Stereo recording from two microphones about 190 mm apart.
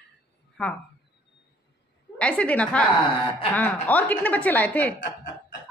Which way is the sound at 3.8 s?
10° left (ahead or behind).